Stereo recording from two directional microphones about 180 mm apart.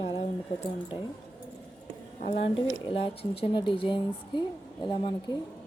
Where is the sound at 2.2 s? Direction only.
30° left (ahead or behind).